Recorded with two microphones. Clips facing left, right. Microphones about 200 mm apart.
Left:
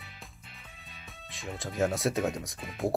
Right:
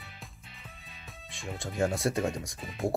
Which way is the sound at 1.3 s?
Centre (ahead or behind).